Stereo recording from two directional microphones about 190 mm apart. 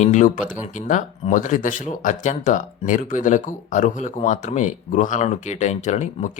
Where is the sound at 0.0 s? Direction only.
40° left (ahead or behind).